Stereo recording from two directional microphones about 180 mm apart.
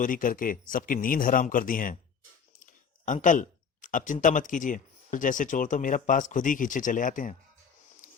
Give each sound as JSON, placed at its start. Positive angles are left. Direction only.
{"t": 0.0, "sound": "speech", "side_deg": 50}
{"t": 3.1, "sound": "speech", "side_deg": 45}
{"t": 8.0, "sound": "a sound", "side_deg": 45}